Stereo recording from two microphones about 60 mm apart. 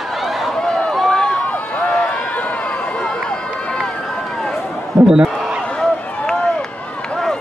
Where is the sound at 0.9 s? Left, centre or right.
Centre.